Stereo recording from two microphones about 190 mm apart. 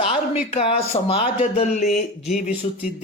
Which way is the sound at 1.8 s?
Centre (ahead or behind).